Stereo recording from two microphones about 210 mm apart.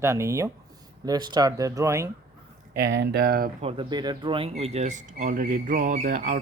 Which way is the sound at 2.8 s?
55° right (ahead or behind).